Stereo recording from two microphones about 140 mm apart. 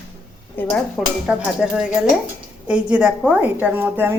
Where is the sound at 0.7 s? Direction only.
Centre (ahead or behind); by 4.1 s 15° right (ahead or behind).